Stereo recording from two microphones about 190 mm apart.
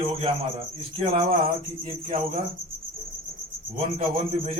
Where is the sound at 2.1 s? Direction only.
35° right (ahead or behind).